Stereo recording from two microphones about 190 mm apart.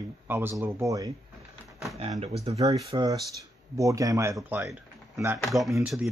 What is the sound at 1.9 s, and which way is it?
Speech, 35° right (ahead or behind).